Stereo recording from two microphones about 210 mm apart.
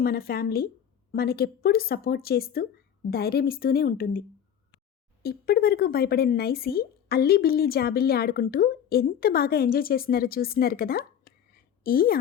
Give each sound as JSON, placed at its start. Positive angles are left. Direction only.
{"t": 0.0, "sound": "speech", "side_deg": 45}
{"t": 5.2, "sound": "a woman's voice", "side_deg": 45}